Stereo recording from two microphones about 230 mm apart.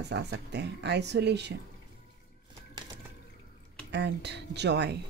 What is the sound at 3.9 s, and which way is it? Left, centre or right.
Speech, right.